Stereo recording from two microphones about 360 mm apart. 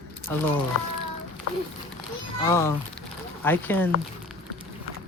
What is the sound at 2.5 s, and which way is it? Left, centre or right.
Speech, centre.